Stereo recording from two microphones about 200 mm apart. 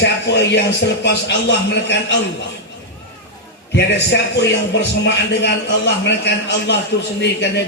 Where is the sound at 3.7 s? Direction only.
60° left (ahead or behind).